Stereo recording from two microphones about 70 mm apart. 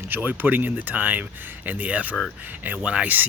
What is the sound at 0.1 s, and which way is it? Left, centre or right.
Speech, right.